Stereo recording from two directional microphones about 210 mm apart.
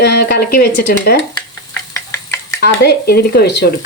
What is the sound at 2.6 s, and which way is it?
Speech, 50° left (ahead or behind).